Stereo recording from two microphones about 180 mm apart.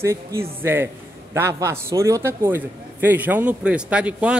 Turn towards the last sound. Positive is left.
turn(degrees=-5)  # may be behind; listen again after turning